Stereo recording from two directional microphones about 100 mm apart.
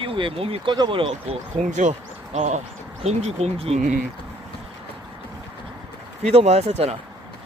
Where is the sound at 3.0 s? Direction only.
90° right.